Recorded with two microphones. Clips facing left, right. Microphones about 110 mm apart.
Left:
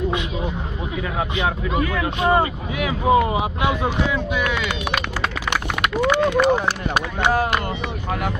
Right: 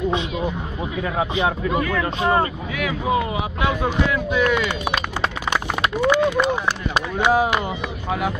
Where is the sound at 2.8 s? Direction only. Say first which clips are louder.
Left 4 dB; 25° left (ahead or behind).